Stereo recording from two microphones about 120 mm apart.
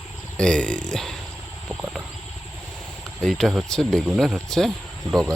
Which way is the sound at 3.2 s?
Centre (ahead or behind).